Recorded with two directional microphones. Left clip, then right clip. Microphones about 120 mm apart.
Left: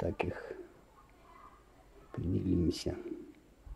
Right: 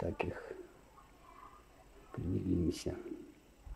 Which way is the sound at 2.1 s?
55° left (ahead or behind).